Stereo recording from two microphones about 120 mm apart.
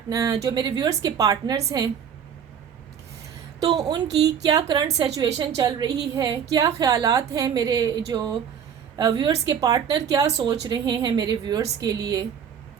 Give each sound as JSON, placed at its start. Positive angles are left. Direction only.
{"t": 0.1, "sound": "a woman's voice", "side_deg": -30}
{"t": 3.6, "sound": "a woman's voice", "side_deg": -30}